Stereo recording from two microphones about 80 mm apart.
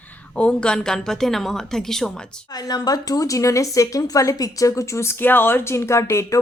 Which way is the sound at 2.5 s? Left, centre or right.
Left.